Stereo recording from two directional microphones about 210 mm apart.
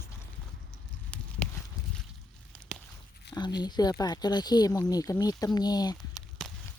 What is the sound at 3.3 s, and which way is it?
Speech, 20° left (ahead or behind).